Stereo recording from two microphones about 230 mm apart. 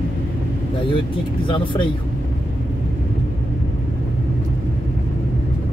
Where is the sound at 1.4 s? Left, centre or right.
Left.